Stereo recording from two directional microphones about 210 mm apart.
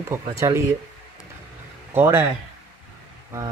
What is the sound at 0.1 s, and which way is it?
Speech, 15° right (ahead or behind).